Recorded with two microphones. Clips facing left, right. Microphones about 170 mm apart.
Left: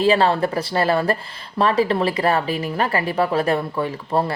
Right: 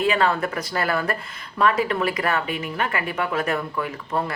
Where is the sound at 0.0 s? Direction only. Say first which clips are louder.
Left 4 dB; 30° left (ahead or behind).